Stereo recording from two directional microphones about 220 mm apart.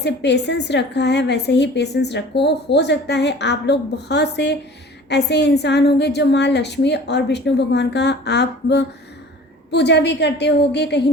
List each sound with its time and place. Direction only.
0.0 s a woman's voice: 50° left (ahead or behind)